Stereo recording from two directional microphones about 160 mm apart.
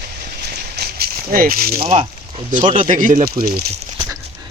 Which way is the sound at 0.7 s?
75° right (ahead or behind).